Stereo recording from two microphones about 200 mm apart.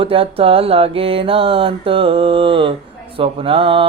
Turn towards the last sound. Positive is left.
turn(degrees=-25)  # may be behind; listen again after turning